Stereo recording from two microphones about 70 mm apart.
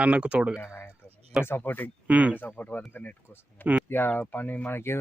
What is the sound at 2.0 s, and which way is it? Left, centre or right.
Speech, centre.